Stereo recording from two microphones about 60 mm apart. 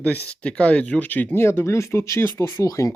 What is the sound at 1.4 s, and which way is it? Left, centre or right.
Speech, left.